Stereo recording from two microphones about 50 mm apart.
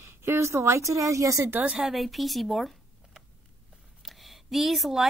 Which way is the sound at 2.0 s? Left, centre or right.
Centre.